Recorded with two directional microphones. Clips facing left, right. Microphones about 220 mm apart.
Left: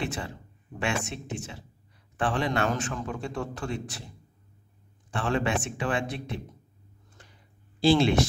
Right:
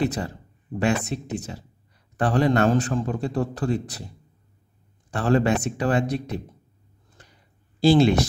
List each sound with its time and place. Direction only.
0.0 s a man's voice: 40° right (ahead or behind)
5.1 s a man's voice: 40° right (ahead or behind)
7.8 s a man's voice: 40° right (ahead or behind)